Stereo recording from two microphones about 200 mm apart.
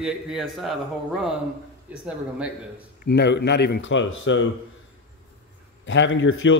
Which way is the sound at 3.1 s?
60° left (ahead or behind).